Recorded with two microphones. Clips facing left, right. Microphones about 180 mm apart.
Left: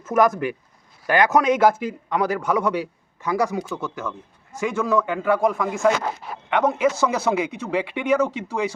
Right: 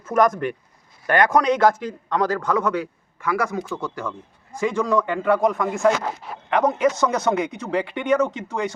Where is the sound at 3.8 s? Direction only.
Centre (ahead or behind).